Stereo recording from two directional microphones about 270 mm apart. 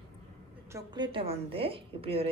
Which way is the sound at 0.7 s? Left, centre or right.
Centre.